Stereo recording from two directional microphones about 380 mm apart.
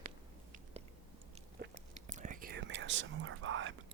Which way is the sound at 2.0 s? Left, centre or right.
Centre.